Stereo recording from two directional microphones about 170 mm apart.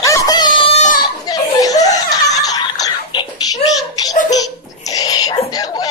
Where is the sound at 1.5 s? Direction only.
20° left (ahead or behind).